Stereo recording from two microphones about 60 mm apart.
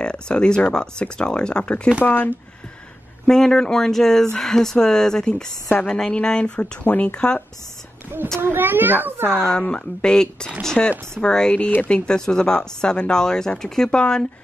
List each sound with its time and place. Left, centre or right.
0.0 s speech: centre
2.0 s speech: left
3.3 s speech: centre
6.8 s speech: left
8.4 s a child's voice: right
9.5 s speech: centre